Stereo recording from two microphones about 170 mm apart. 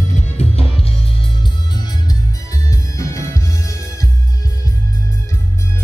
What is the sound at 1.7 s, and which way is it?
Music, 25° left (ahead or behind).